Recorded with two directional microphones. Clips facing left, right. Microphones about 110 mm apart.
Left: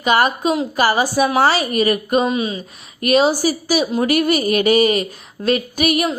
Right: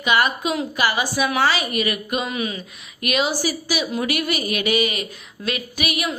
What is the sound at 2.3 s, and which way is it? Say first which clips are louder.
A woman's voice: left 5 dB; 25° left (ahead or behind).